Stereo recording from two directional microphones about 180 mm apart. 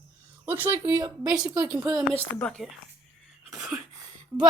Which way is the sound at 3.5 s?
5° right (ahead or behind).